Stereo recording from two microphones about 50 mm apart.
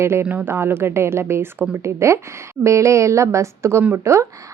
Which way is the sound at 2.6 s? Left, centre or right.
Right.